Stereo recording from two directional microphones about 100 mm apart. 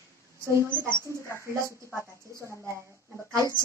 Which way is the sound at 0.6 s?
20° right (ahead or behind).